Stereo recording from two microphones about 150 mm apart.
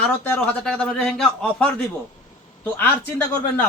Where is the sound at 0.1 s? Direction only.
10° left (ahead or behind).